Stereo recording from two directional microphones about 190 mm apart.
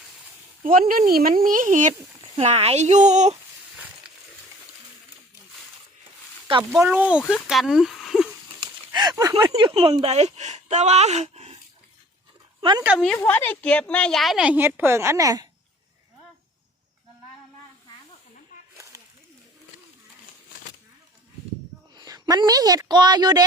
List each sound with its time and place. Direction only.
0.6 s speech: 45° right (ahead or behind)
6.6 s a woman's voice: 10° right (ahead or behind)
8.9 s a sound: 20° right (ahead or behind)
9.5 s speech: 25° right (ahead or behind)
12.8 s a woman's voice: 5° right (ahead or behind)
13.1 s a woman's voice: 10° left (ahead or behind); by 15.4 s 20° right (ahead or behind)
18.8 s a sound: 15° right (ahead or behind)
21.9 s a woman's voice: 20° right (ahead or behind)